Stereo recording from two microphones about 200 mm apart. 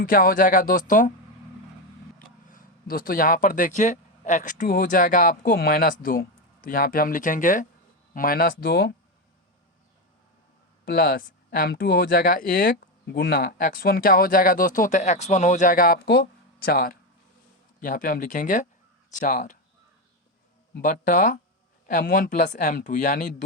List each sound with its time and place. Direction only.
0.0 s speech: 45° left (ahead or behind)
2.5 s speech: 45° left (ahead or behind)
10.8 s speech: 45° left (ahead or behind)
20.8 s speech: 40° left (ahead or behind)